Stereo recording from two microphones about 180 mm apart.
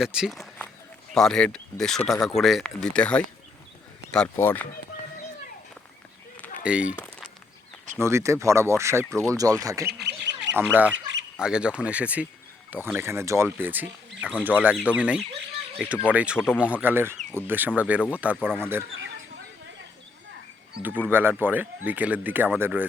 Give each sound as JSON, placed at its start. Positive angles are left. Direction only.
{"t": 0.0, "sound": "speech", "side_deg": -5}
{"t": 6.7, "sound": "speech", "side_deg": -5}
{"t": 10.0, "sound": "bird", "side_deg": -70}
{"t": 10.5, "sound": "speech", "side_deg": -10}
{"t": 10.9, "sound": "squawk", "side_deg": -90}
{"t": 11.3, "sound": "speech", "side_deg": -5}
{"t": 18.9, "sound": "a sound", "side_deg": -90}
{"t": 21.1, "sound": "speech", "side_deg": -10}